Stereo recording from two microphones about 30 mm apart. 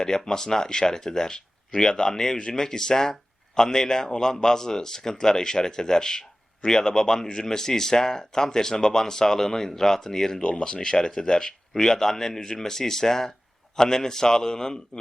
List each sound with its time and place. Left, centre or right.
0.3 s speech: centre